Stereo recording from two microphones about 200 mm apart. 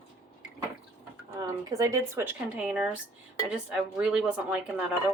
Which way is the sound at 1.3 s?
15° right (ahead or behind).